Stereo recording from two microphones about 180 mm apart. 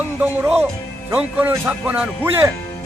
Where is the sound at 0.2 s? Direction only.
10° right (ahead or behind).